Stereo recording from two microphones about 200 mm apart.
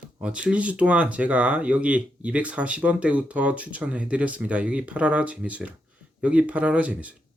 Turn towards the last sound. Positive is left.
turn(degrees=-5)  # may be behind; listen again after turning